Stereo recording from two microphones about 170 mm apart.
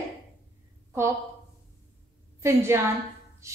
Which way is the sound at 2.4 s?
15° right (ahead or behind).